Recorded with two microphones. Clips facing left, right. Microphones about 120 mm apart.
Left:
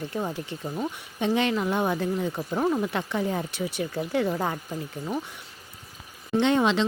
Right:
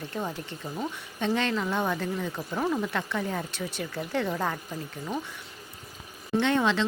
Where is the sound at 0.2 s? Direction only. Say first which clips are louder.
Left 2 dB; 15° left (ahead or behind).